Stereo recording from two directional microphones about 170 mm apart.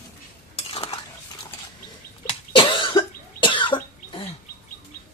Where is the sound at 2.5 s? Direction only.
30° left (ahead or behind).